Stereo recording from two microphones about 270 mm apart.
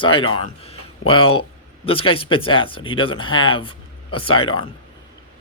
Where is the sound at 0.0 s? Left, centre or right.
Centre.